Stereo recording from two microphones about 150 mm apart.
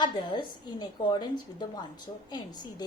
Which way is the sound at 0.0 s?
30° left (ahead or behind).